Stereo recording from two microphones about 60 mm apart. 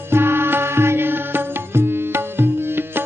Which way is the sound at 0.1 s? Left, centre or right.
Right.